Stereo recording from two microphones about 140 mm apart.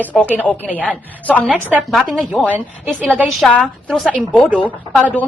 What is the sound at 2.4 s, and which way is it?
Speech, 10° right (ahead or behind).